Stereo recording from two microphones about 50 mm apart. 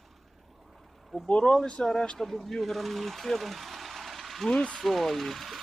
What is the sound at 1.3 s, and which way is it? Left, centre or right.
Speech, left.